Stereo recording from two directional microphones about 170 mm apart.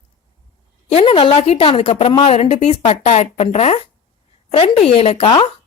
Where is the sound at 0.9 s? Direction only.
35° left (ahead or behind).